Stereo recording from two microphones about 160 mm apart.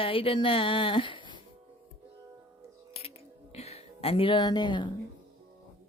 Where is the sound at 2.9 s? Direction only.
40° left (ahead or behind).